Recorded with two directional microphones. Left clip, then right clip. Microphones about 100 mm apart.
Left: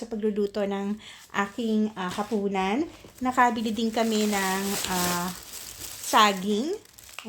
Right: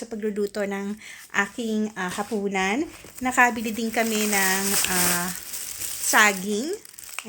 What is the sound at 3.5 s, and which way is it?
Speech, 45° right (ahead or behind).